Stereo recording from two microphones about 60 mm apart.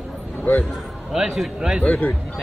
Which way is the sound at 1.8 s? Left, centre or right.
Left.